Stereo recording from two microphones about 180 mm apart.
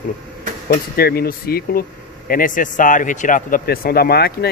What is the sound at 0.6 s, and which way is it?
Speech, 55° left (ahead or behind).